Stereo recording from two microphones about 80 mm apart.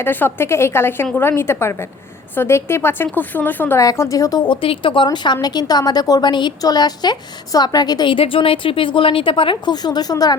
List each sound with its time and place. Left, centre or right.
0.0 s a woman's voice: left
3.8 s a woman's voice: left
4.4 s speech: left
5.0 s a woman's voice: left
8.0 s speech: left